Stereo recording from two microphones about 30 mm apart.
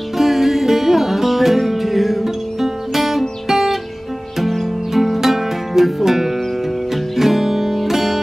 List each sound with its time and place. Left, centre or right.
0.2 s music: centre